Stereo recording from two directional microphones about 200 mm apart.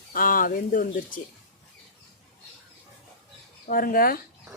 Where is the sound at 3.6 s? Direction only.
45° left (ahead or behind).